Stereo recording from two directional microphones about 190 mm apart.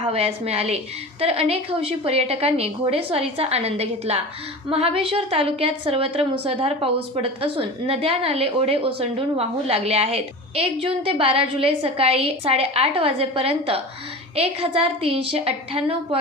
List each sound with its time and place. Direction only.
0.1 s a woman's voice: 30° right (ahead or behind)